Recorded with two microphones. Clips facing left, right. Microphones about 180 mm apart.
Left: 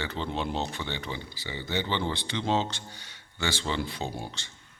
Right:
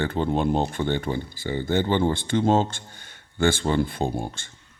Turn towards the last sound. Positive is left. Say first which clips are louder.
# right 8 dB
turn(degrees=-50)  # may be behind; listen again after turning